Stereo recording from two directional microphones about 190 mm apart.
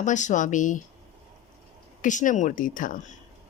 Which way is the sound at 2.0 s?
40° left (ahead or behind).